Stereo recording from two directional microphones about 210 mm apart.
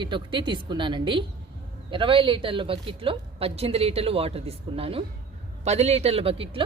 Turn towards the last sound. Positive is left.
turn(degrees=-25)  # may be behind; listen again after turning